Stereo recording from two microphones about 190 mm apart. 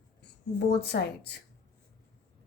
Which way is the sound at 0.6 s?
60° left (ahead or behind).